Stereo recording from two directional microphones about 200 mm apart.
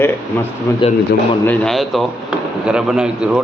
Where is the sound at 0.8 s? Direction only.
25° left (ahead or behind).